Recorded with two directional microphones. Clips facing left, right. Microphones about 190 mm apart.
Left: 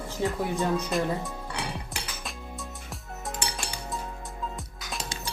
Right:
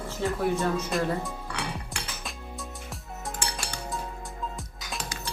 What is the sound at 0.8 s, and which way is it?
Speech, centre (ahead or behind).